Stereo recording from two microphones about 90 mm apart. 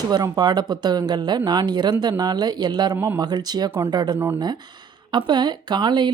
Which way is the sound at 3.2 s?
50° right (ahead or behind).